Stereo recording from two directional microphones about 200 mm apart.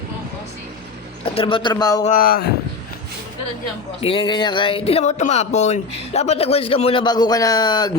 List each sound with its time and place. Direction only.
1.2 s speech: 25° left (ahead or behind)
2.0 s speech: 45° left (ahead or behind)
4.0 s speech: 25° left (ahead or behind)